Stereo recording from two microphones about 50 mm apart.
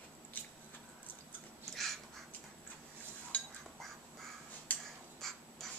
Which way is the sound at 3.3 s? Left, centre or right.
Left.